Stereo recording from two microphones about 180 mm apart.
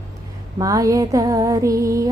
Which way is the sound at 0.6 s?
20° right (ahead or behind).